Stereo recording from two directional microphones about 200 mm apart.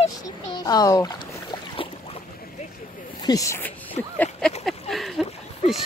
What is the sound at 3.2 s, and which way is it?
Speech, 20° left (ahead or behind).